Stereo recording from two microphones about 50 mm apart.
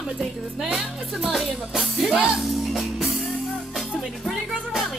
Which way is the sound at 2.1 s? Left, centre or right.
Right.